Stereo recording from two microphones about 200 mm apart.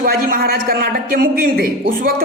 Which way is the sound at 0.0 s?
45° right (ahead or behind).